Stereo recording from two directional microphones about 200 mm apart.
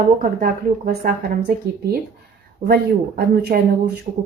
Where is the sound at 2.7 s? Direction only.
55° right (ahead or behind).